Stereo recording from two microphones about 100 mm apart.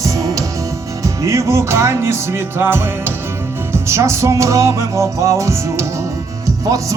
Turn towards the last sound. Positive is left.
turn(degrees=-35)  # may be behind; listen again after turning